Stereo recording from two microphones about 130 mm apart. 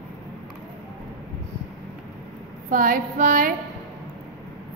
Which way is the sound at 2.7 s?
90° right.